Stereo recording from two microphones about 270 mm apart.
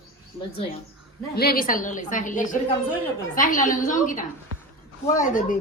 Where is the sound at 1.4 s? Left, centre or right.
Left.